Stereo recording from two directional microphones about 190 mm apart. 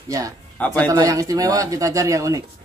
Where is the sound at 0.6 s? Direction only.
10° left (ahead or behind).